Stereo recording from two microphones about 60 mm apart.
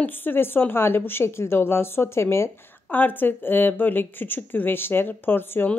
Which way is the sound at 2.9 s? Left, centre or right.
Left.